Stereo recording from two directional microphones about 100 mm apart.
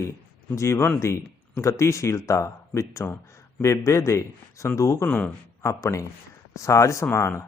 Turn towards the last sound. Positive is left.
turn(degrees=25)  # may be behind; listen again after turning